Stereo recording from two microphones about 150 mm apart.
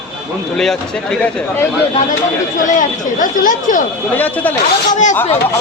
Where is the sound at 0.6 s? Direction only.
5° left (ahead or behind).